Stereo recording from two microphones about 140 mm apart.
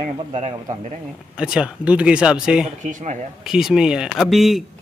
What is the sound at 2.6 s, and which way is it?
Speech, 60° right (ahead or behind).